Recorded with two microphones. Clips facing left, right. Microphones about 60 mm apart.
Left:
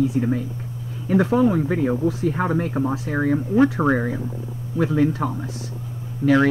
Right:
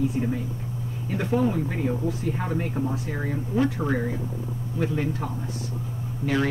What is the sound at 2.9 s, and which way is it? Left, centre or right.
Speech, left.